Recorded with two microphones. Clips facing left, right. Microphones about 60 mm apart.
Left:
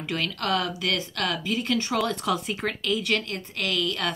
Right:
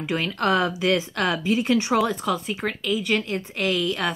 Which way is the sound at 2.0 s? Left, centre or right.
Centre.